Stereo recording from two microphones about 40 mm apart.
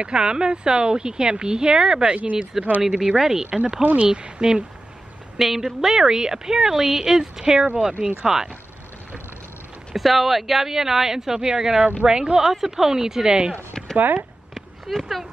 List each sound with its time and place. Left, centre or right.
0.0 s a woman's voice: right
3.4 s speech: right
4.1 s speech: centre
5.4 s a woman's voice: centre
9.9 s a woman's voice: centre; by 12.4 s right
12.4 s a woman's voice: centre
13.9 s speech: right
14.5 s a sound: centre